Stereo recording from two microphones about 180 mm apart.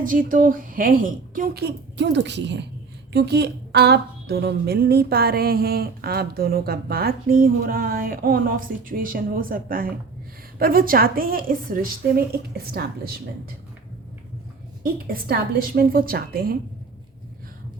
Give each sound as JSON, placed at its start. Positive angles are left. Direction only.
{"t": 0.0, "sound": "a woman's voice", "side_deg": -50}
{"t": 15.1, "sound": "speech", "side_deg": -55}